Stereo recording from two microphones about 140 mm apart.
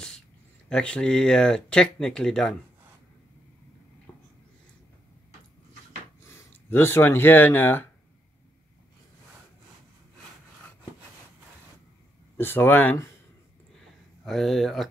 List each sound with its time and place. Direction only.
0.7 s speech: 5° left (ahead or behind)
6.2 s speech: 15° left (ahead or behind)
12.4 s speech: 15° left (ahead or behind)
14.2 s speech: centre (ahead or behind)